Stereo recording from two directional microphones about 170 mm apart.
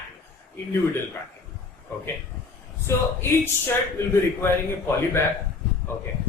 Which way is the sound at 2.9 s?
15° left (ahead or behind).